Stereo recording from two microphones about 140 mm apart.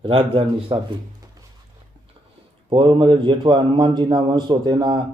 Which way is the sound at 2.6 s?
35° right (ahead or behind).